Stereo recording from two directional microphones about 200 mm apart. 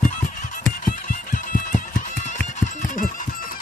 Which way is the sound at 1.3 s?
40° left (ahead or behind).